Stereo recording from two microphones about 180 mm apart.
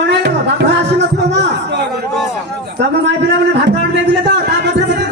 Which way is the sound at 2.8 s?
75° right (ahead or behind).